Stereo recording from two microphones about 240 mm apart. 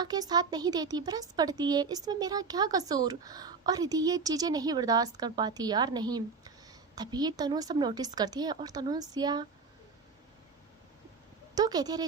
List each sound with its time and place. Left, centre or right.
0.0 s speech: centre
11.5 s speech: centre